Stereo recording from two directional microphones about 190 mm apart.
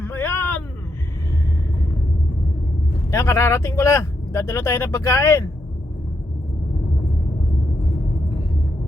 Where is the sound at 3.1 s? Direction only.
15° left (ahead or behind).